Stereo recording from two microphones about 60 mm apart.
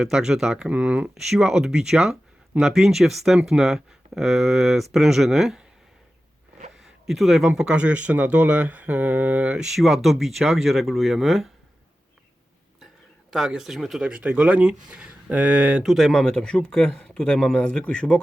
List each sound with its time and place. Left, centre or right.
0.0 s speech: centre
1.1 s speech: centre
6.8 s speech: centre; by 9.6 s right
9.6 s speech: centre
13.3 s speech: centre
14.0 s speech: right
15.8 s a man's voice: centre